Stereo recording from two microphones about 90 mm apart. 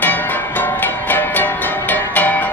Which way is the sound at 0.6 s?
20° left (ahead or behind).